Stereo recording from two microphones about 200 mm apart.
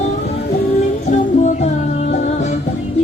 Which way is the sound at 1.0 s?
35° left (ahead or behind).